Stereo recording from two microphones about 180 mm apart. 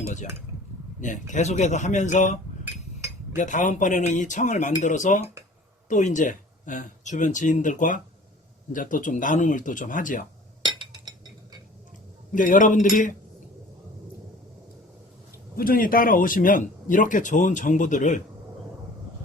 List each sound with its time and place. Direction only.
1.0 s speech: 45° left (ahead or behind)
10.6 s chink: 25° right (ahead or behind)
12.3 s speech: 45° left (ahead or behind)
15.5 s speech: 55° left (ahead or behind)